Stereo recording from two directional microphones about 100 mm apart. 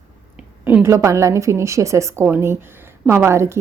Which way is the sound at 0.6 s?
25° right (ahead or behind).